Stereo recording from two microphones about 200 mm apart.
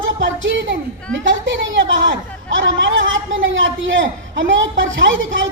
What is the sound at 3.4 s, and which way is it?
A man's voice, 70° right (ahead or behind).